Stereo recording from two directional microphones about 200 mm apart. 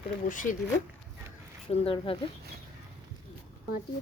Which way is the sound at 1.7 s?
25° left (ahead or behind).